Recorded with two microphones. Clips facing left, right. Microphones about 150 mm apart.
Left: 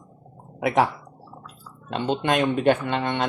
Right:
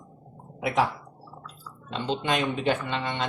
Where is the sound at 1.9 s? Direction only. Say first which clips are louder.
Left 4 dB; 50° left (ahead or behind).